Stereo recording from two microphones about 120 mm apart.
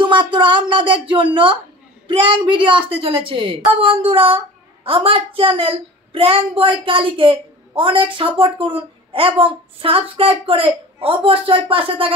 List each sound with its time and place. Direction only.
0.0 s a child's voice: 45° right (ahead or behind)